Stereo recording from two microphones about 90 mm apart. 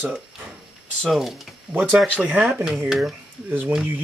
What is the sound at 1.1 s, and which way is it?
Speech, 5° right (ahead or behind).